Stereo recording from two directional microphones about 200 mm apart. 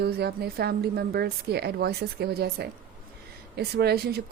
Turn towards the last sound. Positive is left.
turn(degrees=-50)  # may be behind; listen again after turning